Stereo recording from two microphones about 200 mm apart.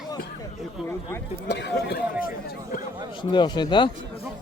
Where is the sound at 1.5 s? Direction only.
60° left (ahead or behind).